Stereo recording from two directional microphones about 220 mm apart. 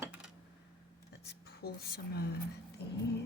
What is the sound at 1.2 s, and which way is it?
A woman's voice, 45° left (ahead or behind).